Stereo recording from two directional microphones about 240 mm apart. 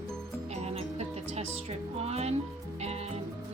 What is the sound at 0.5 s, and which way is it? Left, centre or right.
Music, right.